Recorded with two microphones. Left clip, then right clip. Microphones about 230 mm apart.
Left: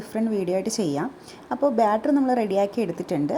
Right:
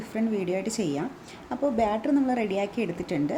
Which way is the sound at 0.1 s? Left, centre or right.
Centre.